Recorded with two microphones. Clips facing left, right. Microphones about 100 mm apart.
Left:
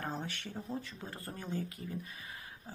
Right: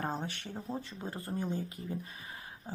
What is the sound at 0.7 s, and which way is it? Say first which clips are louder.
Speech: right 4 dB; 30° right (ahead or behind).